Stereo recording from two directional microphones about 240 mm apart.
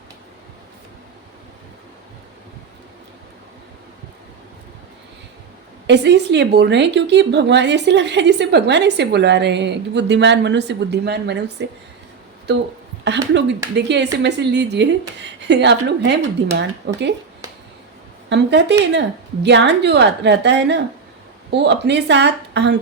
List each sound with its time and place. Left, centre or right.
5.9 s speech: right
18.3 s speech: right